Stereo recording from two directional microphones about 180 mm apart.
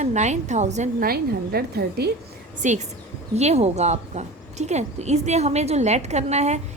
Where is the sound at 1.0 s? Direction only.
60° right (ahead or behind).